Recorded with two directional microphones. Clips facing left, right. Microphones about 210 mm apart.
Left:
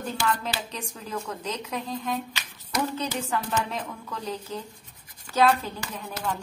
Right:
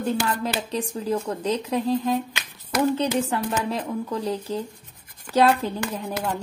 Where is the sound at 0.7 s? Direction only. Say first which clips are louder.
Right 11 dB; 35° right (ahead or behind).